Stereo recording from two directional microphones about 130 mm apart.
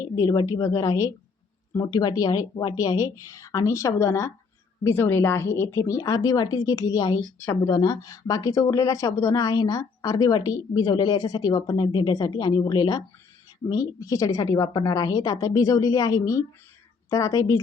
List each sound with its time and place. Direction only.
0.2 s speech: 30° left (ahead or behind)